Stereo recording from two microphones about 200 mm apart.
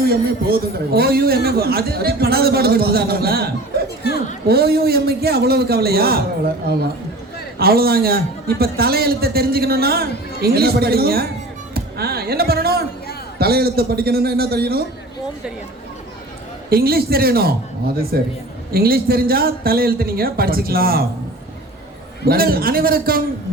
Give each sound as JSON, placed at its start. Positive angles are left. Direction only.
{"t": 0.0, "sound": "a man's voice", "side_deg": -50}
{"t": 4.4, "sound": "a man's voice", "side_deg": -50}
{"t": 7.6, "sound": "a man's voice", "side_deg": -50}
{"t": 11.7, "sound": "music", "side_deg": -50}
{"t": 13.4, "sound": "a man's voice", "side_deg": -50}
{"t": 16.6, "sound": "a man's voice", "side_deg": -50}
{"t": 22.3, "sound": "a man's voice", "side_deg": -50}